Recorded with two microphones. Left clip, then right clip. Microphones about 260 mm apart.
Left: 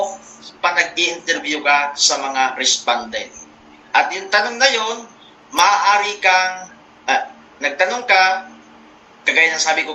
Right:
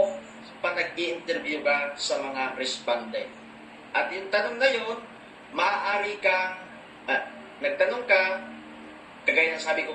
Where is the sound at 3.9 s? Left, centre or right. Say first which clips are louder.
Left 10 dB; left.